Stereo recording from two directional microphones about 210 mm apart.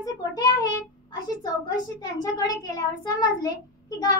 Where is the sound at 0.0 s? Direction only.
20° left (ahead or behind).